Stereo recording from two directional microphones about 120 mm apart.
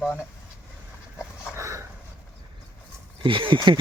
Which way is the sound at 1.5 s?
25° right (ahead or behind).